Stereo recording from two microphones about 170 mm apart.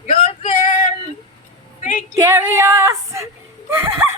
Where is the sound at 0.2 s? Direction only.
45° left (ahead or behind).